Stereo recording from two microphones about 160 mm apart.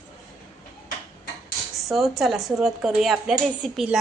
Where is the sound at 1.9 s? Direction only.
Centre (ahead or behind).